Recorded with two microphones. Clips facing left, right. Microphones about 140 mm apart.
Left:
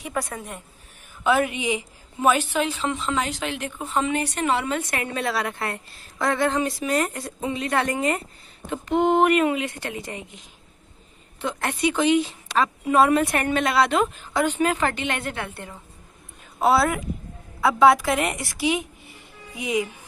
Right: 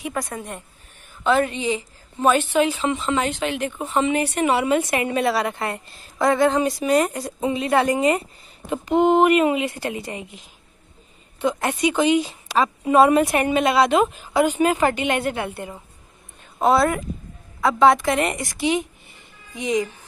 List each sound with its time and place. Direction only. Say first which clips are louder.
0.0 s a woman's voice: right 1 dB; centre (ahead or behind)
1.2 s a woman's voice: right 2 dB; 10° left (ahead or behind)
11.4 s a woman's voice: right 3 dB; 5° right (ahead or behind)
16.6 s a woman's voice: right 2 dB; 5° left (ahead or behind)